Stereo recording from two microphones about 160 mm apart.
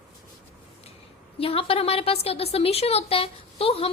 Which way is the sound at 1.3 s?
35° left (ahead or behind).